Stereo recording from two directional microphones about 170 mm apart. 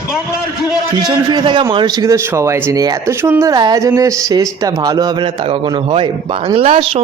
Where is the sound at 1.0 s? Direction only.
25° right (ahead or behind).